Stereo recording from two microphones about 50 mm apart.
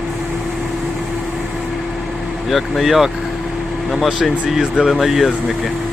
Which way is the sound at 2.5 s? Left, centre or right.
Centre.